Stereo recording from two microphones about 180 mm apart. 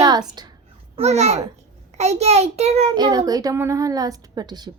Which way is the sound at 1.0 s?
35° right (ahead or behind).